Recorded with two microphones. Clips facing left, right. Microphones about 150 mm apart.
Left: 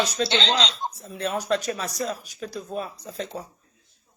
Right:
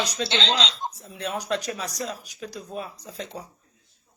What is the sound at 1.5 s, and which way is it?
Speech, 15° right (ahead or behind).